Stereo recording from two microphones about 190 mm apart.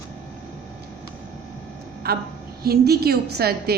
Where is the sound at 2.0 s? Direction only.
55° right (ahead or behind).